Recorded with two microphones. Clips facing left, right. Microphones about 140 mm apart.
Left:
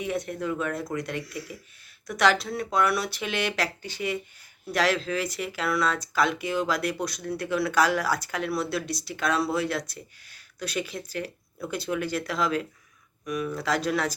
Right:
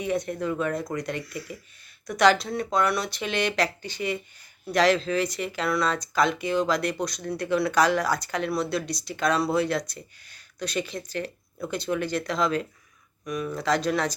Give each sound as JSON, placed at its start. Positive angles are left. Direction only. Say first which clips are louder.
{"t": 0.0, "sound": "speech", "louder": "right 2 dB", "side_deg": 0}